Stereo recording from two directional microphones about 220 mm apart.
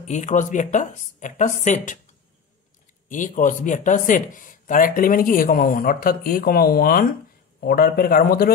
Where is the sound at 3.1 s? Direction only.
35° left (ahead or behind).